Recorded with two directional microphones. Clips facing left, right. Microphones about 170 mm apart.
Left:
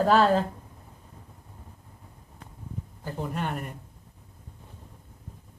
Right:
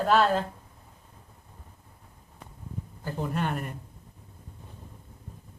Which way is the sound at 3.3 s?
10° left (ahead or behind).